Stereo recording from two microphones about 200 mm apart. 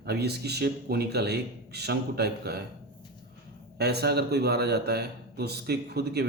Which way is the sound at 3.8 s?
55° right (ahead or behind).